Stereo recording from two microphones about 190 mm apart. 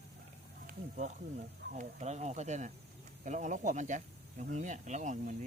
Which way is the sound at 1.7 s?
40° right (ahead or behind).